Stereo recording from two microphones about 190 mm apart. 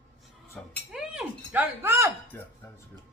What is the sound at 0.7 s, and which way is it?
Speech, centre (ahead or behind).